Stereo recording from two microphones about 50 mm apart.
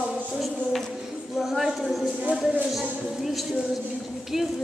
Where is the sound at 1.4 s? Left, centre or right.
Centre.